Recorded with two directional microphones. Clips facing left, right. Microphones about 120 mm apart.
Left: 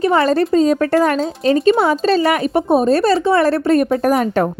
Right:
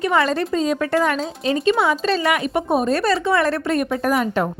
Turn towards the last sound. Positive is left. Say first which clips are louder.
# left 4 dB
turn(degrees=35)  # may be behind; listen again after turning